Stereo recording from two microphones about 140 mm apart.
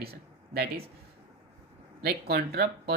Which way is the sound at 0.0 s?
90° right.